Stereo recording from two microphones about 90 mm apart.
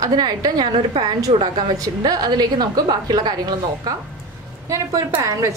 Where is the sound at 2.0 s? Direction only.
50° right (ahead or behind).